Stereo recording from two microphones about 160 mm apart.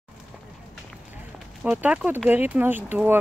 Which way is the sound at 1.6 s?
10° right (ahead or behind).